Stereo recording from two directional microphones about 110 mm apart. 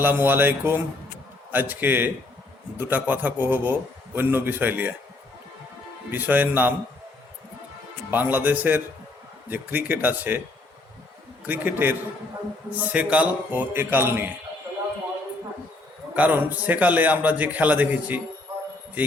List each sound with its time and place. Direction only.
0.0 s a man's voice: 20° right (ahead or behind)
6.1 s a man's voice: 15° right (ahead or behind)
8.1 s a man's voice: 15° right (ahead or behind)
11.4 s a man's voice: 15° right (ahead or behind)
16.1 s a man's voice: 15° right (ahead or behind)